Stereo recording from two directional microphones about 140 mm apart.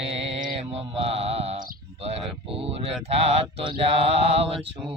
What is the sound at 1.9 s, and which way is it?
Speech, 45° right (ahead or behind).